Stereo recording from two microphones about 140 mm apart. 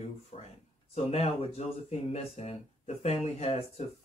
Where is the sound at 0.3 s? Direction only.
50° left (ahead or behind).